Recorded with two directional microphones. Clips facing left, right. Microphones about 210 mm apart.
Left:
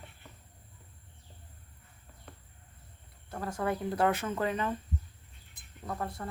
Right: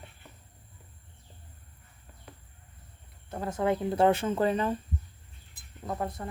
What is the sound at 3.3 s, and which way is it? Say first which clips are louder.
Speech: right 4 dB; 20° right (ahead or behind).